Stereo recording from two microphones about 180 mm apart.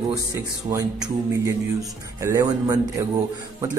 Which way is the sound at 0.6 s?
20° right (ahead or behind).